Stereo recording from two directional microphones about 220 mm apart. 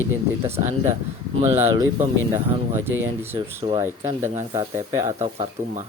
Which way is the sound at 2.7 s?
10° right (ahead or behind).